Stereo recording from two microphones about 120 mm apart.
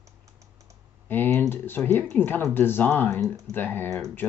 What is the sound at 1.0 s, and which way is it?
Typing, 15° left (ahead or behind).